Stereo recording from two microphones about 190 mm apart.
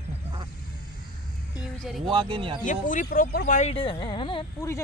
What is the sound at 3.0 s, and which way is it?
Speech, 55° left (ahead or behind).